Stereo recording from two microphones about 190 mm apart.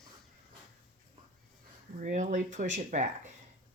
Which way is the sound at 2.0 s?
40° right (ahead or behind).